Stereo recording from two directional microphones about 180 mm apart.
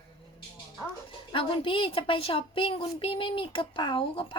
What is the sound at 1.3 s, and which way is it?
A woman's voice, 30° left (ahead or behind).